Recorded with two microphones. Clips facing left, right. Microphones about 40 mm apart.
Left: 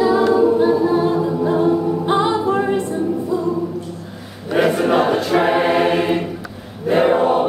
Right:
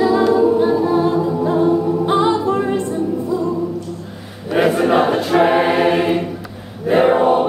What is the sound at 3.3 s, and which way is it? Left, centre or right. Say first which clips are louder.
Music: right 2 dB; centre.